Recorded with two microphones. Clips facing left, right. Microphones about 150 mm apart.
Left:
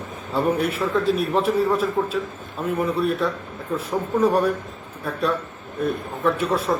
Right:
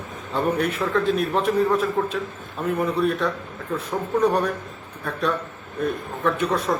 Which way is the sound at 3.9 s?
5° left (ahead or behind).